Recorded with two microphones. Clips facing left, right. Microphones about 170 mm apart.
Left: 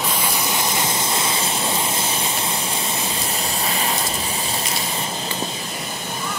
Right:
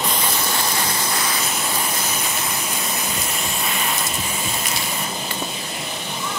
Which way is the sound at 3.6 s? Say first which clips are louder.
Left 2 dB; 35° left (ahead or behind).